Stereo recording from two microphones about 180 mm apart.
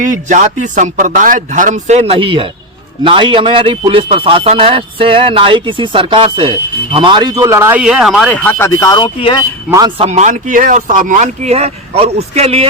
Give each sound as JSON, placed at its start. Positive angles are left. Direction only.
{"t": 0.0, "sound": "speech", "side_deg": -45}
{"t": 9.6, "sound": "speech", "side_deg": -20}
{"t": 10.0, "sound": "speech", "side_deg": -40}